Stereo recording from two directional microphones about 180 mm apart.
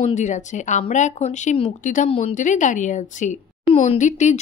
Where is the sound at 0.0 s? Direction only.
40° left (ahead or behind).